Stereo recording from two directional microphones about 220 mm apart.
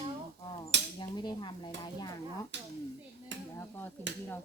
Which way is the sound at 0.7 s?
55° right (ahead or behind).